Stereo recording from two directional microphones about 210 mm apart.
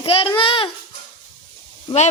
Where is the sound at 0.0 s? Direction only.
25° left (ahead or behind).